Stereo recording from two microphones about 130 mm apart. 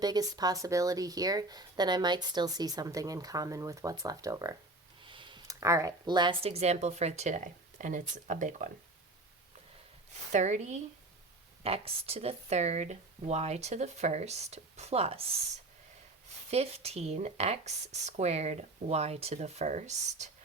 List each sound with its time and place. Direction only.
0.0 s speech: 30° right (ahead or behind)
5.0 s a sound: 40° right (ahead or behind)
5.5 s speech: 25° right (ahead or behind)
6.4 s speech: 55° right (ahead or behind); by 8.7 s 75° right (ahead or behind)
10.3 s speech: 65° right (ahead or behind)
11.6 s speech: 50° right (ahead or behind)
16.5 s speech: 50° right (ahead or behind)